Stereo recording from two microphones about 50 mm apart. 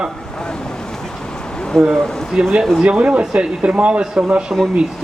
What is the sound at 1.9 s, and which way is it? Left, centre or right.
Speech, centre.